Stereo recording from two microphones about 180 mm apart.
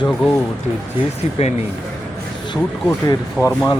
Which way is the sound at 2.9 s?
15° left (ahead or behind).